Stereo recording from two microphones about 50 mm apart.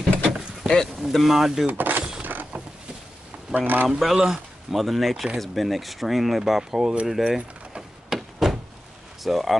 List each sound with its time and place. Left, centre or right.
0.7 s speech: centre
1.7 s a sound: right
3.5 s speech: right
4.0 s speech: centre
7.3 s door: centre
8.4 s a sound: centre
9.2 s speech: centre